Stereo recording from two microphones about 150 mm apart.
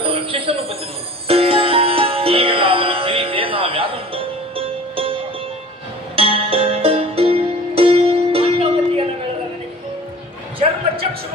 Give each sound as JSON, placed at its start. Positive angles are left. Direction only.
{"t": 0.0, "sound": "music", "side_deg": -40}